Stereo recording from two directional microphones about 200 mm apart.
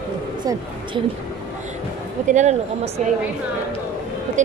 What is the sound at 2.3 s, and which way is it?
Speech, 35° right (ahead or behind).